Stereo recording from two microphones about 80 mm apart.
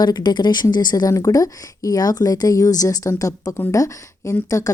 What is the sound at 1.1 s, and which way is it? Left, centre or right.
Speech, left.